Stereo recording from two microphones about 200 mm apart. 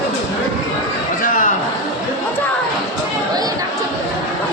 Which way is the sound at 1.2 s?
40° left (ahead or behind).